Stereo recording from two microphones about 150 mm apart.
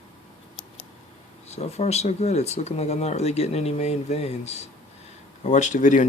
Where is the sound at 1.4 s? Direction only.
45° left (ahead or behind).